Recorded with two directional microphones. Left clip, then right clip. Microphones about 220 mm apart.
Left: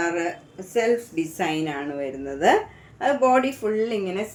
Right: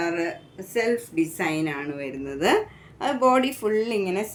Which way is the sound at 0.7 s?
20° right (ahead or behind).